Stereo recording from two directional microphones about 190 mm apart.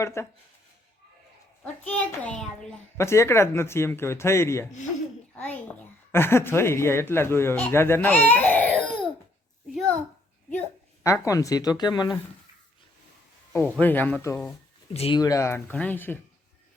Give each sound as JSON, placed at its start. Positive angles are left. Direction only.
{"t": 0.0, "sound": "speech", "side_deg": 15}
{"t": 1.6, "sound": "a woman's voice", "side_deg": 10}
{"t": 9.7, "sound": "a sound", "side_deg": 5}
{"t": 11.0, "sound": "speech", "side_deg": 15}
{"t": 13.7, "sound": "speech", "side_deg": 10}
{"t": 14.9, "sound": "speech", "side_deg": 30}
{"t": 15.2, "sound": "speech", "side_deg": 15}